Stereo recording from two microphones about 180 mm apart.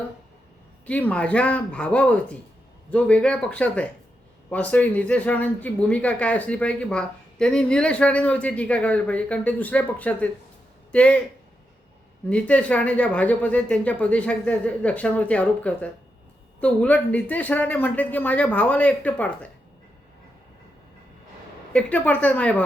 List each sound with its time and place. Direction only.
0.9 s speech: 10° left (ahead or behind)
12.3 s speech: 5° left (ahead or behind)
21.7 s speech: 5° left (ahead or behind)